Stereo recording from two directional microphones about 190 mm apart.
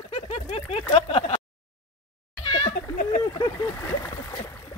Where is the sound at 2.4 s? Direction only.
25° left (ahead or behind).